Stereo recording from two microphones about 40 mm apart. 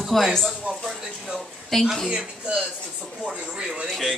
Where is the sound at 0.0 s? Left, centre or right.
Centre.